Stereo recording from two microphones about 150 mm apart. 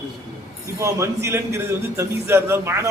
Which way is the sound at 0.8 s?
20° right (ahead or behind).